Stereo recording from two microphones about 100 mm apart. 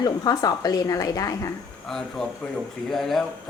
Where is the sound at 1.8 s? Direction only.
5° left (ahead or behind).